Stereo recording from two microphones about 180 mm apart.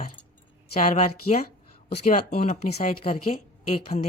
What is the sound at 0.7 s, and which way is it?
Speech, 40° left (ahead or behind).